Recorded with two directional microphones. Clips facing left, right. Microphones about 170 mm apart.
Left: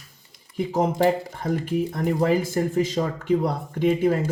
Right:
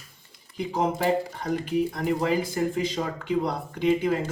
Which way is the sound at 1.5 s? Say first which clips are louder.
Left 1 dB; 45° left (ahead or behind).